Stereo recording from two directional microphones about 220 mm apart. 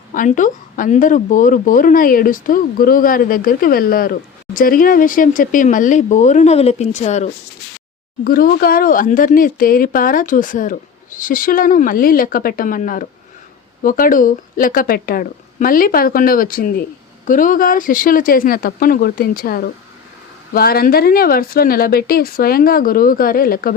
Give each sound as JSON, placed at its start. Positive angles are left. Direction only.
{"t": 0.1, "sound": "a woman's voice", "side_deg": 35}